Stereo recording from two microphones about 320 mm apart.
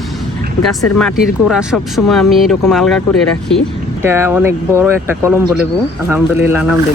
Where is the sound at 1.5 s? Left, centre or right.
Centre.